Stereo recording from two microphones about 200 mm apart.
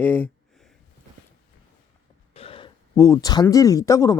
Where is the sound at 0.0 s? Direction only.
10° left (ahead or behind).